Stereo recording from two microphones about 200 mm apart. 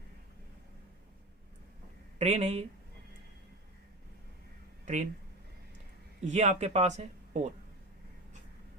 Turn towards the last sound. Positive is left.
turn(degrees=-35)  # may be behind; listen again after turning